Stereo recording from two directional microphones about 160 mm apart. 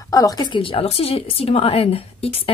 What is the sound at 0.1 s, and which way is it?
Speech, 20° left (ahead or behind).